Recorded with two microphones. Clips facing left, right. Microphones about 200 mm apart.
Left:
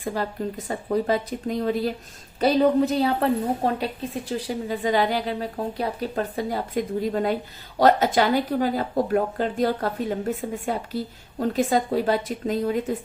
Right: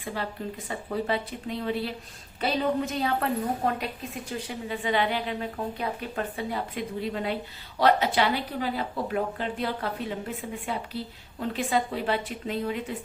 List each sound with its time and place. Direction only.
0.0 s a woman's voice: 40° left (ahead or behind)